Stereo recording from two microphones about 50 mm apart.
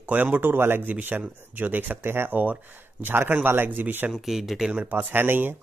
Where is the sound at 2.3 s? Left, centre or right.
Right.